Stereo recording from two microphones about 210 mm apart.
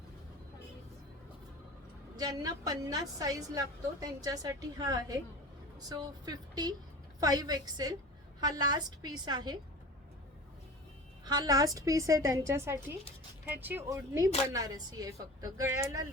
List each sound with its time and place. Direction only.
2.1 s a woman's voice: 20° right (ahead or behind)
11.3 s a woman's voice: 20° right (ahead or behind)